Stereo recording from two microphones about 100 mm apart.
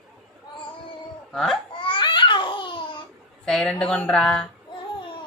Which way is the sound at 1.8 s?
55° left (ahead or behind).